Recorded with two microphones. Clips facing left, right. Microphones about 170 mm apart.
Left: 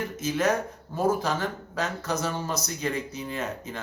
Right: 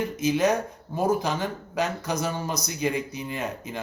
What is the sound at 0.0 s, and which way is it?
A man's voice, 15° right (ahead or behind).